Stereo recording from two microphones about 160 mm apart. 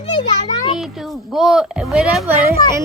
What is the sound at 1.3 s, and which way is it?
Speech, 5° right (ahead or behind).